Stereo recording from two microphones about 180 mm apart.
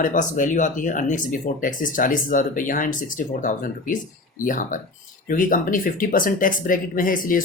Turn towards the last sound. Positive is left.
turn(degrees=50)  # may be behind; listen again after turning